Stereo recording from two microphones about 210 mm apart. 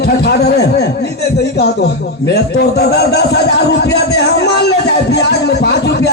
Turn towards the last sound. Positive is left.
turn(degrees=50)  # may be behind; listen again after turning